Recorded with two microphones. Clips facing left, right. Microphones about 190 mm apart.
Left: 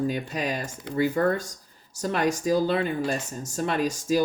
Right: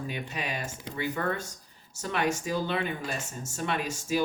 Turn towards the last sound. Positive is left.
turn(degrees=40)  # may be behind; listen again after turning